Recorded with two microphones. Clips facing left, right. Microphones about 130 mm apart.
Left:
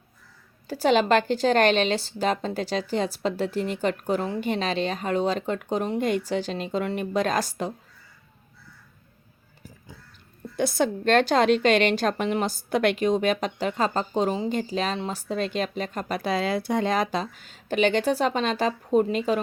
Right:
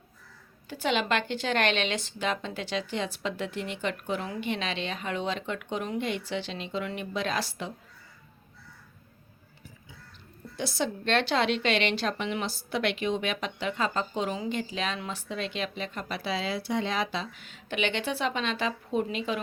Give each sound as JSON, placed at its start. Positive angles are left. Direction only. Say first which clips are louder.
{"t": 0.7, "sound": "speech", "louder": "left 8 dB", "side_deg": 40}
{"t": 10.6, "sound": "a woman's voice", "louder": "left 7 dB", "side_deg": 50}